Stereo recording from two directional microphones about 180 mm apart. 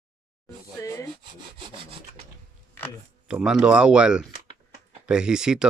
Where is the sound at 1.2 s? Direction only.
25° right (ahead or behind).